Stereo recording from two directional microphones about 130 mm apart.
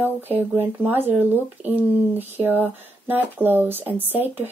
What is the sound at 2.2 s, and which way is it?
Speech, 15° right (ahead or behind).